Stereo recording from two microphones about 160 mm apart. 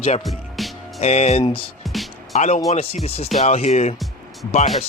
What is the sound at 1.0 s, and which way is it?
Speech, 45° left (ahead or behind).